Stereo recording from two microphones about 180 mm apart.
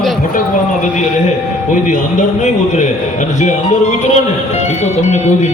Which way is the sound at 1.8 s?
45° left (ahead or behind).